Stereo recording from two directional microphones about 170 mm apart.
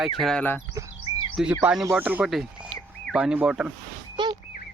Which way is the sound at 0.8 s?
20° right (ahead or behind).